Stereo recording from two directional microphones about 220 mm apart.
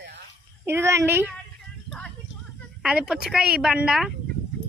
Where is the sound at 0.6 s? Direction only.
10° right (ahead or behind).